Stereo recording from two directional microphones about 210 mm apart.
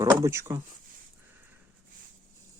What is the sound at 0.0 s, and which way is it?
Speech, 15° right (ahead or behind).